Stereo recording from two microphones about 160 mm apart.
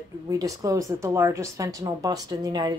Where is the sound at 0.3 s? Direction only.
20° right (ahead or behind).